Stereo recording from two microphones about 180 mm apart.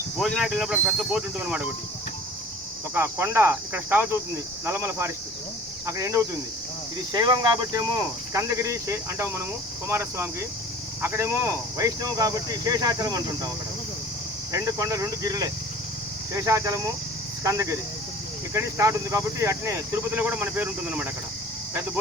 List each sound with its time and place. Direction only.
0.2 s speech: centre (ahead or behind)
2.9 s speech: 10° right (ahead or behind)
14.5 s speech: 20° right (ahead or behind)